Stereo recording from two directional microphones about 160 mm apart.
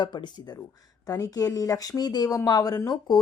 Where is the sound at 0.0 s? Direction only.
25° left (ahead or behind).